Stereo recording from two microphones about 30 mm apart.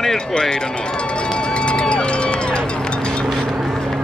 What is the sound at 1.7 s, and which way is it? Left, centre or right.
Run, left.